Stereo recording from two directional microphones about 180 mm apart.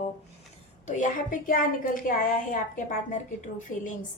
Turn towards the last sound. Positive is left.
turn(degrees=45)  # may be behind; listen again after turning